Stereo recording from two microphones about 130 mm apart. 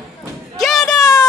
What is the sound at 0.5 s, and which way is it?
Music, centre (ahead or behind).